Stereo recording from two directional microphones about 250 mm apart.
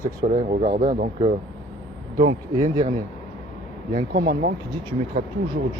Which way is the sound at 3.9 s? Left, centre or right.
Right.